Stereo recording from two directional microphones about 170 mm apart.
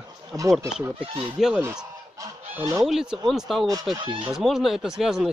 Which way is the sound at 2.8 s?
5° right (ahead or behind).